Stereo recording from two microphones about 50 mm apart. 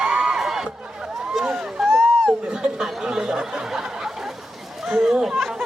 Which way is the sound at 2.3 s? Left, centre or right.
Centre.